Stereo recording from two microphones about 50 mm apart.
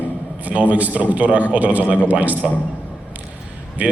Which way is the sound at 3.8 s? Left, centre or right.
Right.